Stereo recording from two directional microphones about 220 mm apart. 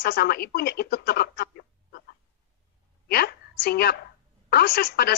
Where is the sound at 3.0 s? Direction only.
45° left (ahead or behind).